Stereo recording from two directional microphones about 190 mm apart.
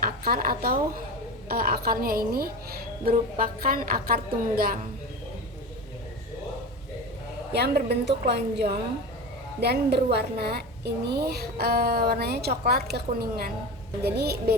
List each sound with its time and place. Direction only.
0.0 s a woman's voice: 50° right (ahead or behind)
7.5 s a woman's voice: 60° right (ahead or behind)